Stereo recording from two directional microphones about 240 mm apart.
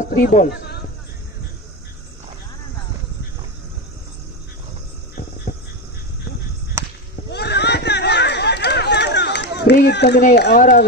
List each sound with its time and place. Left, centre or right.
0.0 s speech: left
5.5 s a sound: left
6.8 s whip: centre
7.2 s run: left